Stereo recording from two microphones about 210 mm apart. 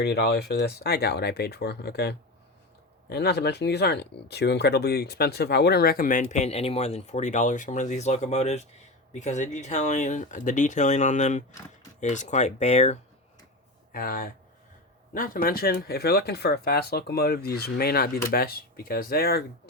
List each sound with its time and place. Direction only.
0.0 s speech: 50° left (ahead or behind); by 13.0 s 30° left (ahead or behind)
13.9 s speech: 45° left (ahead or behind)